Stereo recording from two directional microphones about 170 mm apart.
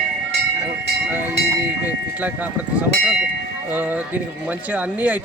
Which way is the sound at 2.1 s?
10° right (ahead or behind).